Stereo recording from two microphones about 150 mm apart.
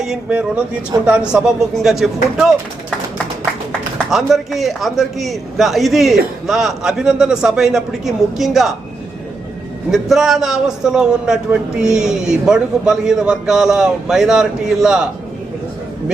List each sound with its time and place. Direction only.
0.0 s speech: 5° right (ahead or behind)
0.9 s speech: 20° right (ahead or behind)
1.3 s a man's voice: 5° right (ahead or behind)
3.7 s a man's voice: 5° left (ahead or behind)
9.9 s a man's voice: centre (ahead or behind)